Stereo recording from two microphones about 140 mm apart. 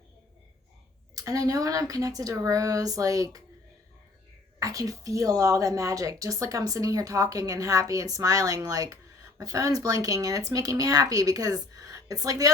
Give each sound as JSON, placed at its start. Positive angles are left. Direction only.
{"t": 1.1, "sound": "a woman's voice", "side_deg": -25}
{"t": 4.6, "sound": "a woman's voice", "side_deg": -25}